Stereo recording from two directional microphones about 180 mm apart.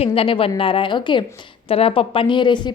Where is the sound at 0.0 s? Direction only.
30° left (ahead or behind).